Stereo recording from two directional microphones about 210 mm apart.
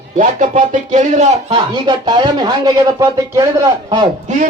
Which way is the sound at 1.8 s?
20° right (ahead or behind).